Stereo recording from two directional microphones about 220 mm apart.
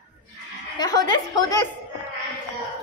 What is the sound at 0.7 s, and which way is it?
Chuckle, 20° left (ahead or behind).